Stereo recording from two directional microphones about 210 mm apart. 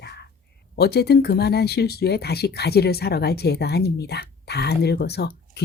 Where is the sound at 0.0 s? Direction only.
55° left (ahead or behind).